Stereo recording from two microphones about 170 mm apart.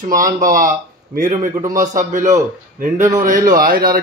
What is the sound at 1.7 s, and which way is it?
A man's voice, 50° right (ahead or behind).